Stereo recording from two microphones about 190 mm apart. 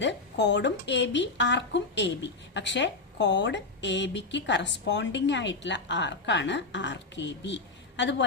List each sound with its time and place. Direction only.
0.0 s speech: 70° left (ahead or behind)